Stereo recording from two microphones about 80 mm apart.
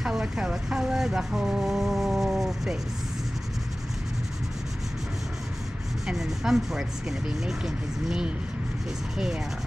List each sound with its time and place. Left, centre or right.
0.0 s speech: centre
6.0 s speech: centre